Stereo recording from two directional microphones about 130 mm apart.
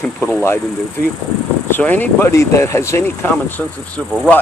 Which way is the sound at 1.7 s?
15° left (ahead or behind).